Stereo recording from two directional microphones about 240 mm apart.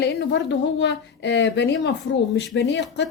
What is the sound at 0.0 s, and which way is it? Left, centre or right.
Speech, left.